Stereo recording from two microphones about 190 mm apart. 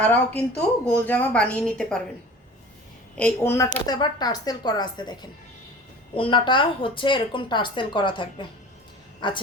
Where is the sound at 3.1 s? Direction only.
10° left (ahead or behind).